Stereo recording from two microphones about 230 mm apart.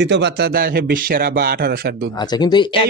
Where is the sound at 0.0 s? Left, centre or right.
Right.